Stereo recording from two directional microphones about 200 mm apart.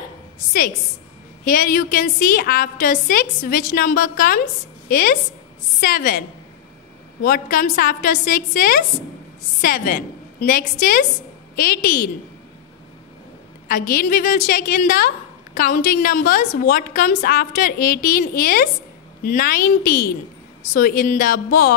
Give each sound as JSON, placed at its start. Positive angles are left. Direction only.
{"t": 1.4, "sound": "a woman's voice", "side_deg": 45}
{"t": 7.2, "sound": "a woman's voice", "side_deg": 45}
{"t": 13.7, "sound": "a woman's voice", "side_deg": 45}